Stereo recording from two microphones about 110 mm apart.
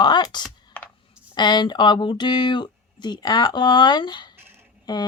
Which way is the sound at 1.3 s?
45° left (ahead or behind).